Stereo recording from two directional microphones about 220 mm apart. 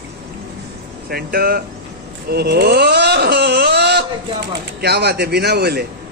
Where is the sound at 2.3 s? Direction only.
45° right (ahead or behind).